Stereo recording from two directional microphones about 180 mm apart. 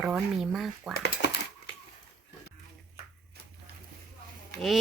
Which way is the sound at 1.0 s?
70° left (ahead or behind).